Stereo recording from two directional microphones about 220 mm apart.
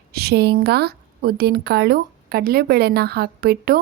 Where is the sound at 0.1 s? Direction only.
45° right (ahead or behind).